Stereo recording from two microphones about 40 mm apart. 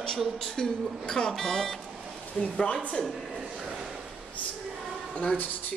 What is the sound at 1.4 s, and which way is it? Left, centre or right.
Speech, centre.